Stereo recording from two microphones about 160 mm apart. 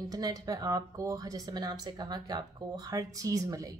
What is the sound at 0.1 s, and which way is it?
A woman's voice, 25° right (ahead or behind).